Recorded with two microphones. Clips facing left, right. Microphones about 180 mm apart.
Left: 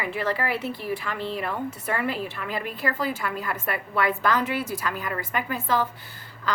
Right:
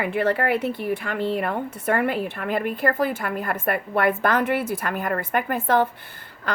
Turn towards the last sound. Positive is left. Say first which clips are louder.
# right 5 dB
turn(degrees=-55)  # may be behind; listen again after turning